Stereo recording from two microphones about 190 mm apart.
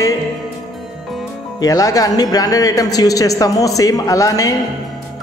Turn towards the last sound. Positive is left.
turn(degrees=20)  # may be behind; listen again after turning